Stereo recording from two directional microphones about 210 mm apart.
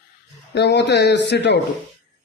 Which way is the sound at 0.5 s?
55° left (ahead or behind).